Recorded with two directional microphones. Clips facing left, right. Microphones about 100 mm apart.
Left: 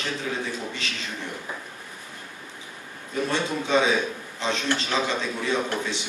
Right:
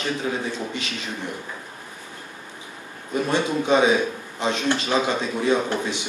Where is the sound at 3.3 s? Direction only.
15° right (ahead or behind).